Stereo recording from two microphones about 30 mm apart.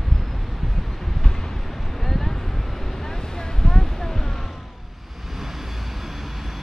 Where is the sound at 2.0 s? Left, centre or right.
Centre.